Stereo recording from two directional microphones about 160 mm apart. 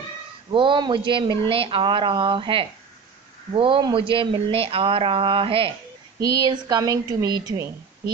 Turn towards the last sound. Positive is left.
turn(degrees=-25)  # may be behind; listen again after turning